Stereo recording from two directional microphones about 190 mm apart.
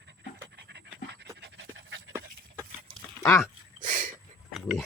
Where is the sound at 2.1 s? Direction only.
15° right (ahead or behind).